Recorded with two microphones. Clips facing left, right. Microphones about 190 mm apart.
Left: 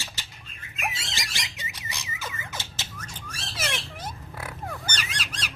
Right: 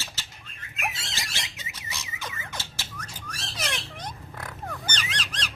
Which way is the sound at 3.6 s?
5° left (ahead or behind).